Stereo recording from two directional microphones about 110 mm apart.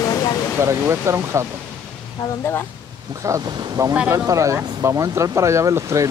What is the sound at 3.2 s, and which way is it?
Speech, 35° right (ahead or behind).